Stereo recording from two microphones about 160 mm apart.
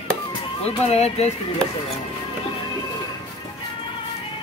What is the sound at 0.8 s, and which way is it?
Speech, 40° left (ahead or behind).